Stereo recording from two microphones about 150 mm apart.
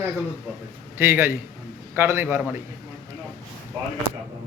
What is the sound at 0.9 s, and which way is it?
A man's voice, 15° right (ahead or behind).